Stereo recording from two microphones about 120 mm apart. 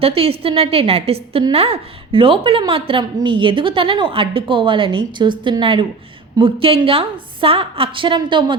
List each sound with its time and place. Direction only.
0.0 s a woman's voice: 55° right (ahead or behind)